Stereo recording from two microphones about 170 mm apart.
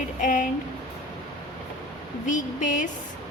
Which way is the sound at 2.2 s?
50° left (ahead or behind).